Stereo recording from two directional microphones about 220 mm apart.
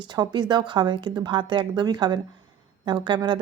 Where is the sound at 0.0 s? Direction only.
20° right (ahead or behind).